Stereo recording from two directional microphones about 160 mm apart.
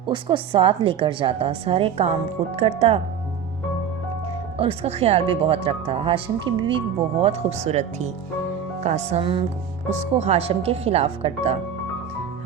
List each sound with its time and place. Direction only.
0.1 s speech: 30° right (ahead or behind)
4.5 s speech: 40° right (ahead or behind)